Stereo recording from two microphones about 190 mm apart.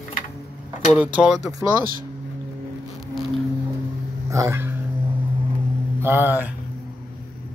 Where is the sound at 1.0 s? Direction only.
5° right (ahead or behind).